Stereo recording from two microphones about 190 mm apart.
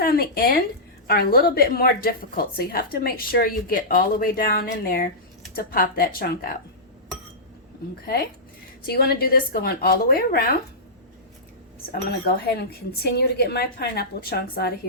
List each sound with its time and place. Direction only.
0.0 s a woman's voice: 50° left (ahead or behind)
8.0 s a woman's voice: 55° left (ahead or behind)
11.9 s speech: 55° left (ahead or behind)